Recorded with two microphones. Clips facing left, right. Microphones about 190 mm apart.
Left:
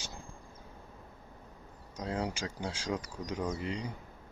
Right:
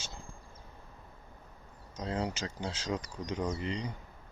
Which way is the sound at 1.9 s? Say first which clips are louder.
Even; 10° left (ahead or behind).